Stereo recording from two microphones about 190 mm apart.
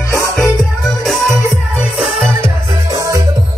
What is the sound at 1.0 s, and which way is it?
Music, centre (ahead or behind).